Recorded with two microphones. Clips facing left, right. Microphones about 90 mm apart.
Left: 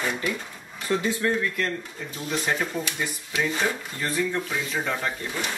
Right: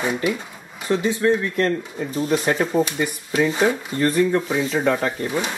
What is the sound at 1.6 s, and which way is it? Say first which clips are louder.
Speech: right 8 dB; 40° right (ahead or behind).